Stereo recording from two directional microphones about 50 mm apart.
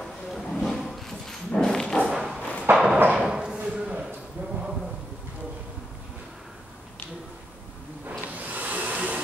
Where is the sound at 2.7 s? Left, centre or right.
Centre.